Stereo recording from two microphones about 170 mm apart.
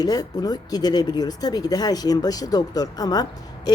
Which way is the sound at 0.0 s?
20° left (ahead or behind).